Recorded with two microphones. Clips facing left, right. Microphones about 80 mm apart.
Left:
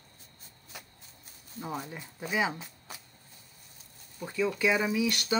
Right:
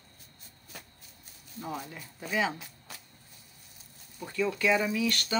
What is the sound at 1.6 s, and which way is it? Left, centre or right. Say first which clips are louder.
Speech: left 1 dB; left.